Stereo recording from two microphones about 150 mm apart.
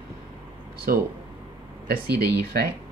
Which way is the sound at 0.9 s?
75° right (ahead or behind).